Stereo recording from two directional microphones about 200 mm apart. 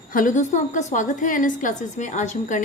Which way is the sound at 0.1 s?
40° left (ahead or behind).